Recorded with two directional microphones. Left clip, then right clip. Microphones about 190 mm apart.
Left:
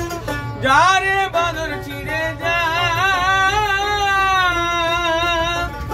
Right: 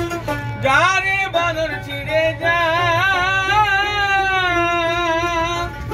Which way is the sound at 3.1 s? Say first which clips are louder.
Left 1 dB; 25° left (ahead or behind).